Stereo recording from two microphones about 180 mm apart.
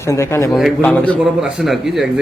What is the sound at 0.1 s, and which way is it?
A man's voice, 15° left (ahead or behind).